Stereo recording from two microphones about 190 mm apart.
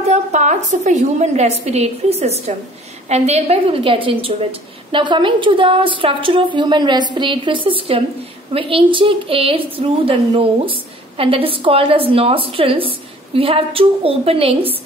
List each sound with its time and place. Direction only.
0.1 s a woman's voice: 40° right (ahead or behind)